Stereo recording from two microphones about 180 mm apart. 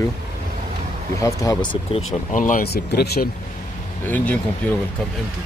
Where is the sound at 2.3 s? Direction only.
45° left (ahead or behind); by 3.3 s 65° left (ahead or behind).